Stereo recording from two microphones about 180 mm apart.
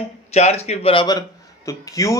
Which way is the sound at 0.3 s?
35° left (ahead or behind).